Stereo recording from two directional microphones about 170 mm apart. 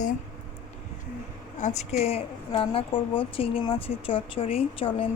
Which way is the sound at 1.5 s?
45° left (ahead or behind).